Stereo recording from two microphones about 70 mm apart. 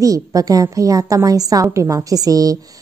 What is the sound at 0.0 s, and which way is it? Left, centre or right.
A woman's voice, right.